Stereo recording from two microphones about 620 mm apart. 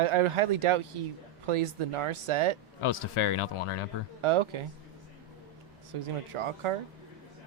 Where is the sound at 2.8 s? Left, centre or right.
Left.